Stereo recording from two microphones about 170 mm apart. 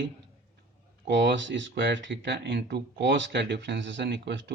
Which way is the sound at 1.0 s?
90° right.